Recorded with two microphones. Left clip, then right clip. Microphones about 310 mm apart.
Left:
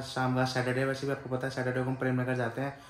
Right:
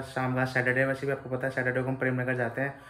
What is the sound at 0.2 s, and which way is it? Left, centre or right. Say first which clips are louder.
Speech: right 2 dB; centre.